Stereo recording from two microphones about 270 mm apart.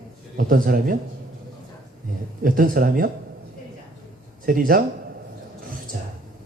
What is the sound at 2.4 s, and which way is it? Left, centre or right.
Speech, right.